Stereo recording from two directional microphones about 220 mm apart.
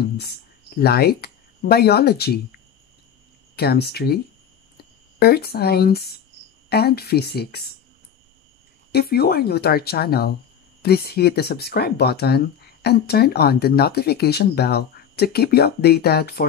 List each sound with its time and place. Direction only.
0.2 s speech: 45° left (ahead or behind)
3.5 s speech: 45° left (ahead or behind)
5.2 s speech: 45° left (ahead or behind)
8.9 s speech: 45° left (ahead or behind)